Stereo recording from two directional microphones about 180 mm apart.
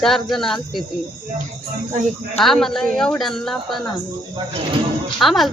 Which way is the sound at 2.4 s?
Centre (ahead or behind).